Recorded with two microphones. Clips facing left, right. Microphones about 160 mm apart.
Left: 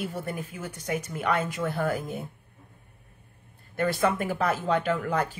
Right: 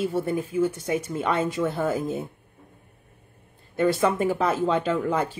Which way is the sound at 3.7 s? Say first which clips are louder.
Right 4 dB; 25° right (ahead or behind).